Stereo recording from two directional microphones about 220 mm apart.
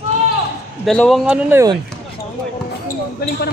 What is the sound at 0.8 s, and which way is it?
Speech, centre (ahead or behind).